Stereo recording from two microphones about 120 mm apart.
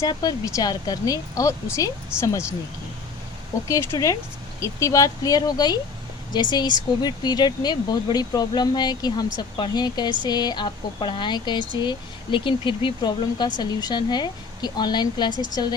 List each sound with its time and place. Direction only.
0.0 s speech: 30° left (ahead or behind)
3.7 s speech: 30° left (ahead or behind)